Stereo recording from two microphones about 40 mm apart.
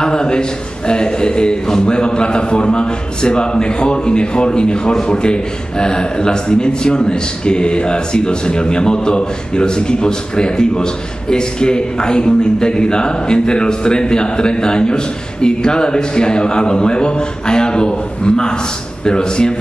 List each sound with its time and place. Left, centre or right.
0.0 s a man's voice: left